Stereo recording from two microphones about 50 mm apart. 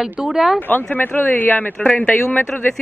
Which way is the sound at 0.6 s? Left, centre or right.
Left.